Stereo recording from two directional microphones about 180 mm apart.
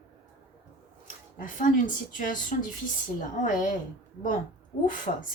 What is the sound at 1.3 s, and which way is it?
A woman's voice, 50° left (ahead or behind).